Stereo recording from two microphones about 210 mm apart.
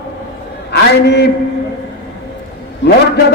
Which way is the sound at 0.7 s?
55° left (ahead or behind).